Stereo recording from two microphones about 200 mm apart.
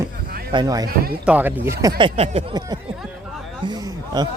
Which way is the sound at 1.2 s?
5° right (ahead or behind).